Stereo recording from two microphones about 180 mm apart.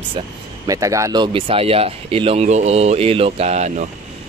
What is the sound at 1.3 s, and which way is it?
Speech, 30° right (ahead or behind).